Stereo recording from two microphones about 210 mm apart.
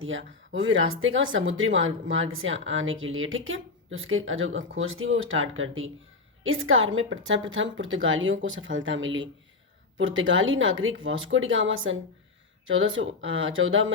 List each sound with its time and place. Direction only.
0.0 s speech: 65° right (ahead or behind)